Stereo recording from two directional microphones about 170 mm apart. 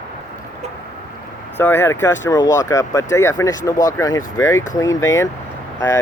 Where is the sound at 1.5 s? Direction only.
10° left (ahead or behind).